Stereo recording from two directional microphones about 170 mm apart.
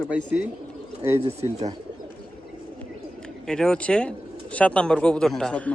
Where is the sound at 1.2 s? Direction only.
40° right (ahead or behind).